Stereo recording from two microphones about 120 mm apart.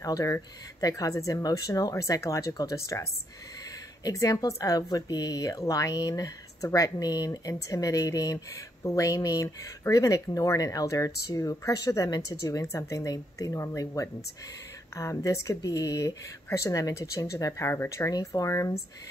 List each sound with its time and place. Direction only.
0.0 s speech: 30° left (ahead or behind)